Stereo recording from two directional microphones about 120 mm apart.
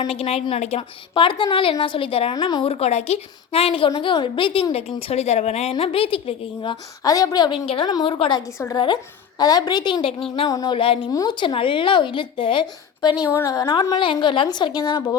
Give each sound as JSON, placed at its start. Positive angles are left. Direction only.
{"t": 0.1, "sound": "speech", "side_deg": 55}
{"t": 2.3, "sound": "a woman's voice", "side_deg": 35}
{"t": 2.6, "sound": "speech", "side_deg": 60}
{"t": 4.9, "sound": "speech", "side_deg": 55}
{"t": 5.7, "sound": "speech", "side_deg": 50}
{"t": 7.0, "sound": "a woman's voice", "side_deg": 30}
{"t": 10.5, "sound": "a woman's voice", "side_deg": 30}
{"t": 10.8, "sound": "speech", "side_deg": 50}
{"t": 11.1, "sound": "a woman's voice", "side_deg": 30}